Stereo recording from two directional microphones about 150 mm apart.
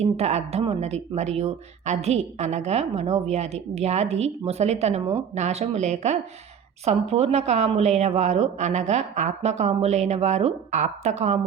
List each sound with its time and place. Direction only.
0.0 s a woman's voice: 45° right (ahead or behind)